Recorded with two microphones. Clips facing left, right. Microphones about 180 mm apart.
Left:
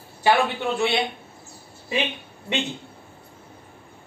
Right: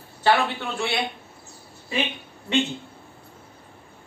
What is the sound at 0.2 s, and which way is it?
Speech, 15° left (ahead or behind).